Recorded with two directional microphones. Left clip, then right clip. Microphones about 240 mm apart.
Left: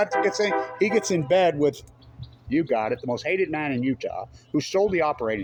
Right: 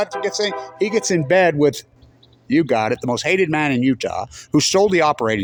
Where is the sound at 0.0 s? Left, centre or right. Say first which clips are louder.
Right 1 dB; right.